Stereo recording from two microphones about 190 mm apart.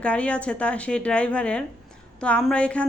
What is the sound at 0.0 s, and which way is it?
A woman's voice, 5° left (ahead or behind).